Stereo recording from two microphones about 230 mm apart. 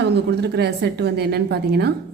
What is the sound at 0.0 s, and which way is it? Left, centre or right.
A woman's voice, right.